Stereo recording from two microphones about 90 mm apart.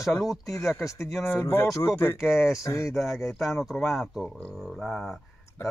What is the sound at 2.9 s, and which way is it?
Speech, centre (ahead or behind).